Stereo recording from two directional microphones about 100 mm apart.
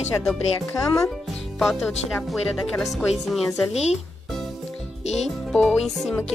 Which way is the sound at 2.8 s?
Centre (ahead or behind).